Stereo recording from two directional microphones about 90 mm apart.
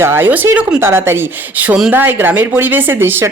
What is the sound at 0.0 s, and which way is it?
Speech, 25° right (ahead or behind).